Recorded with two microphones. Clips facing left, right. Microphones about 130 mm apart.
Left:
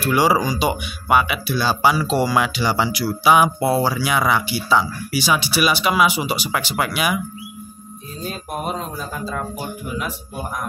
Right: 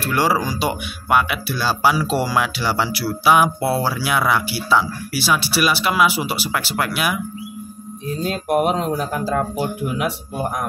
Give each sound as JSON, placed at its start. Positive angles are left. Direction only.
{"t": 0.0, "sound": "speech", "side_deg": 0}
{"t": 8.2, "sound": "speech", "side_deg": -75}